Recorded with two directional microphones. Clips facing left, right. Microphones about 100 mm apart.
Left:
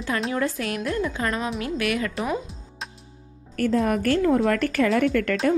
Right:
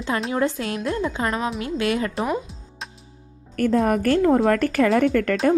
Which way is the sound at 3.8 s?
40° right (ahead or behind).